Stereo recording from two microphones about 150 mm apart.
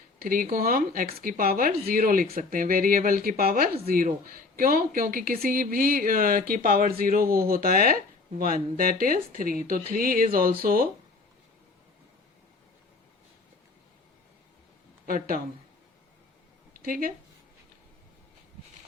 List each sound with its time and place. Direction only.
0.2 s speech: 70° right (ahead or behind)
15.0 s speech: 70° right (ahead or behind)
16.8 s speech: 70° right (ahead or behind)